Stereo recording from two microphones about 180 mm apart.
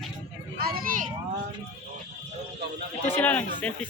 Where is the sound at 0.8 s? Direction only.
50° right (ahead or behind).